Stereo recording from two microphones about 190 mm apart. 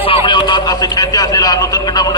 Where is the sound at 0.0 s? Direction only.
30° left (ahead or behind).